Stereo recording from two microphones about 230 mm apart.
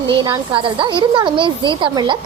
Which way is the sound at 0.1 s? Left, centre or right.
Right.